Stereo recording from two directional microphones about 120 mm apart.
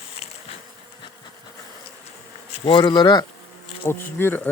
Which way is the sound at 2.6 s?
40° left (ahead or behind).